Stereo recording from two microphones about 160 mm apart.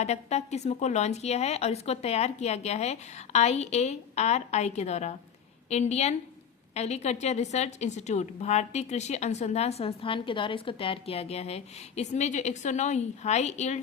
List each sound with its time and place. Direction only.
0.0 s a woman's voice: 45° left (ahead or behind)